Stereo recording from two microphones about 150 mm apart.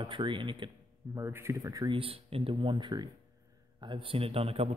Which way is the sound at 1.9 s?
40° right (ahead or behind).